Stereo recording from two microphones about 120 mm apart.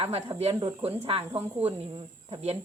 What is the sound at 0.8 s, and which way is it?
Speech, 55° right (ahead or behind).